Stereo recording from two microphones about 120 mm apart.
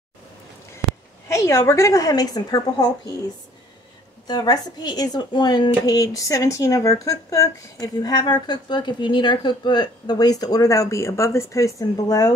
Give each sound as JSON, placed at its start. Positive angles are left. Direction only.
{"t": 1.3, "sound": "a woman's voice", "side_deg": 25}
{"t": 4.3, "sound": "speech", "side_deg": 35}